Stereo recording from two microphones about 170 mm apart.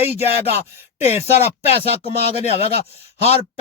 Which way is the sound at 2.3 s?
35° left (ahead or behind).